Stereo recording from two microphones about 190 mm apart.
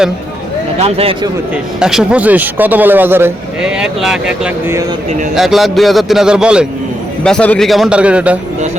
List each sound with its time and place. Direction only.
0.8 s speech: 30° right (ahead or behind)
1.8 s a man's voice: 5° right (ahead or behind)
5.3 s a man's voice: centre (ahead or behind)
7.3 s a man's voice: 5° left (ahead or behind)